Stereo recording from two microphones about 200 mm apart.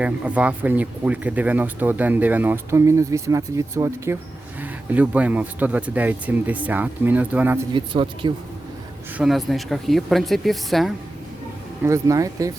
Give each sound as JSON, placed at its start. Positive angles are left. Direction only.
{"t": 0.0, "sound": "speech", "side_deg": -5}
{"t": 7.7, "sound": "speech", "side_deg": -25}
{"t": 9.1, "sound": "speech", "side_deg": 0}
{"t": 11.9, "sound": "speech", "side_deg": -15}